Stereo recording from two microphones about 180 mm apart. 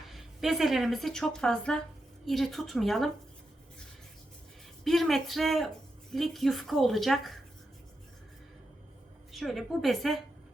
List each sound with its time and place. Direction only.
0.1 s a woman's voice: centre (ahead or behind)
4.8 s a woman's voice: centre (ahead or behind)
9.3 s a woman's voice: centre (ahead or behind)